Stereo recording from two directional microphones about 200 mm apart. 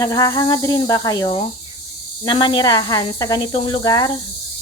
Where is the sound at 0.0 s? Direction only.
20° left (ahead or behind).